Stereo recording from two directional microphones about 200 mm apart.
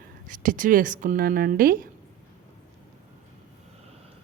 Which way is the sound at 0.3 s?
40° right (ahead or behind).